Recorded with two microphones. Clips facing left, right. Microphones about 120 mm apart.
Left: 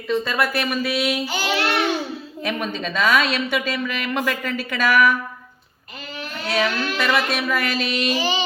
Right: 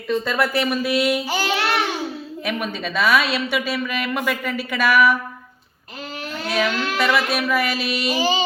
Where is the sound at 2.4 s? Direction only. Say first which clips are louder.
Left 1 dB; 10° right (ahead or behind).